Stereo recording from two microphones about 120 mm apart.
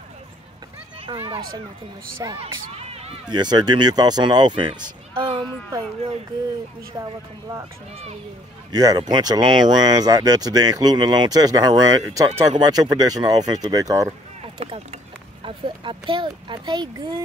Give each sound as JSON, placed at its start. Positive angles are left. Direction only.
{"t": 1.0, "sound": "speech", "side_deg": -45}
{"t": 2.7, "sound": "run", "side_deg": -55}
{"t": 3.3, "sound": "speech", "side_deg": -35}
{"t": 6.9, "sound": "speech", "side_deg": -25}
{"t": 8.7, "sound": "speech", "side_deg": -35}
{"t": 14.6, "sound": "speech", "side_deg": -60}
{"t": 15.4, "sound": "speech", "side_deg": -45}